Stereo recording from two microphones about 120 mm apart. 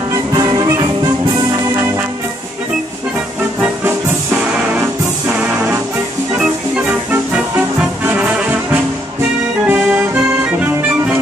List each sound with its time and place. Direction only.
0.1 s music: 30° right (ahead or behind)
3.8 s music: 15° right (ahead or behind)